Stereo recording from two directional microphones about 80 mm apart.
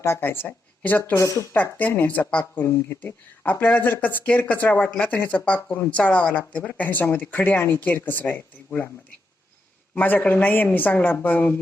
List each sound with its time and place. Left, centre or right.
0.0 s speech: left
1.1 s speech: left
1.5 s speech: left
9.9 s speech: centre